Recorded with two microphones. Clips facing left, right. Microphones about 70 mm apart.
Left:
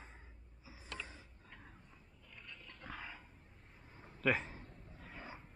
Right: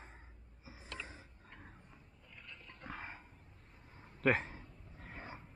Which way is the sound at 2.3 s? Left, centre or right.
Centre.